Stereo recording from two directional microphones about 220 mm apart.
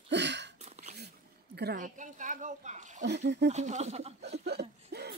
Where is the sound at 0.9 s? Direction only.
50° right (ahead or behind).